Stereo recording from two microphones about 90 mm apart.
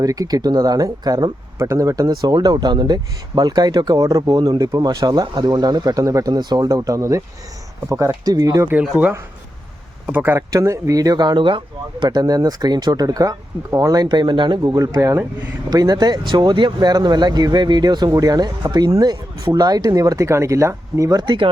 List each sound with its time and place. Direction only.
0.0 s speech: 45° right (ahead or behind)
1.5 s speech: 35° right (ahead or behind); by 3.9 s 50° right (ahead or behind)
3.9 s speech: 40° right (ahead or behind)
10.1 s speech: 20° right (ahead or behind)
10.5 s speech: 35° right (ahead or behind); by 12.0 s 65° right (ahead or behind)
12.0 s speech: 45° right (ahead or behind)
14.1 s speech: 60° right (ahead or behind); by 21.1 s 35° right (ahead or behind)
21.1 s speech: 55° right (ahead or behind)